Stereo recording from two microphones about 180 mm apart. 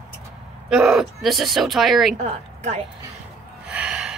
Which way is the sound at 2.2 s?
40° right (ahead or behind).